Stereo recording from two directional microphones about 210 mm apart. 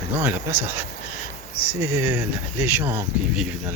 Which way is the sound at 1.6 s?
10° right (ahead or behind).